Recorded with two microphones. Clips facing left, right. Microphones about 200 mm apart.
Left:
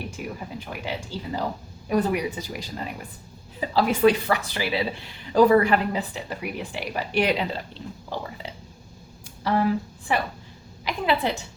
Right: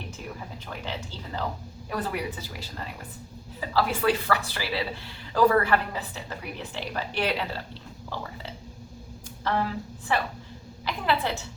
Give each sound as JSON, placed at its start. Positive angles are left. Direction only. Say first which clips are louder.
{"t": 0.2, "sound": "speech", "louder": "left 5 dB", "side_deg": 15}
{"t": 9.5, "sound": "speech", "louder": "left 5 dB", "side_deg": 10}